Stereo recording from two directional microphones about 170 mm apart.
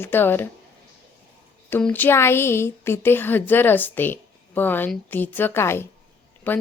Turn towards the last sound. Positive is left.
turn(degrees=10)  # may be behind; listen again after turning